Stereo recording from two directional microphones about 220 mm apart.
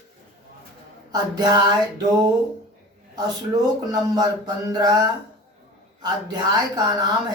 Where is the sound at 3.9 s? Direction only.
15° right (ahead or behind).